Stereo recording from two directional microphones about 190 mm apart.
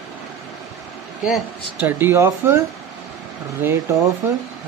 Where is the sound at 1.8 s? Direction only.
10° right (ahead or behind).